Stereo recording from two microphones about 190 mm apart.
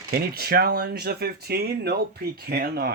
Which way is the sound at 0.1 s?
55° right (ahead or behind).